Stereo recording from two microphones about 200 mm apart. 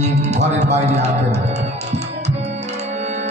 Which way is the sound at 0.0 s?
35° right (ahead or behind).